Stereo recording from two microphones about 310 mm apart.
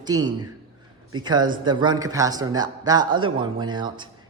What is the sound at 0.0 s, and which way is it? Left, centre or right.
A man's voice, centre.